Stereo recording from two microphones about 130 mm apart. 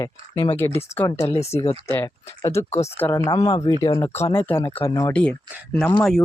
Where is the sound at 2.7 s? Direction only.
60° left (ahead or behind).